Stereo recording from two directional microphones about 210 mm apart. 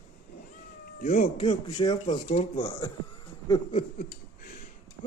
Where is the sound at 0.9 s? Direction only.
45° left (ahead or behind).